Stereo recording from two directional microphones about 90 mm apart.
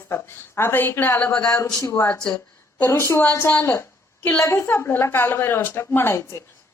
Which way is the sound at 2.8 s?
30° left (ahead or behind).